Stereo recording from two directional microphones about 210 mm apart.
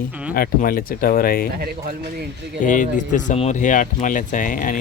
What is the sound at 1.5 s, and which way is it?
Speech, 45° right (ahead or behind).